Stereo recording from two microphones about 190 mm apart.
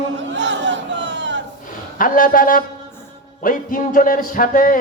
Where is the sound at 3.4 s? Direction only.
45° left (ahead or behind).